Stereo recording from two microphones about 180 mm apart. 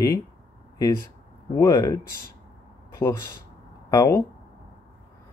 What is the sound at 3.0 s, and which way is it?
Speech, 10° left (ahead or behind).